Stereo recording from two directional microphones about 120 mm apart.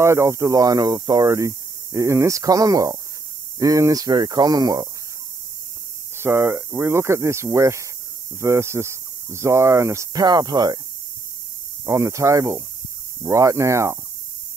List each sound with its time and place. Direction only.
0.0 s speech: 25° right (ahead or behind)
6.1 s speech: 20° right (ahead or behind)
11.8 s speech: 25° right (ahead or behind)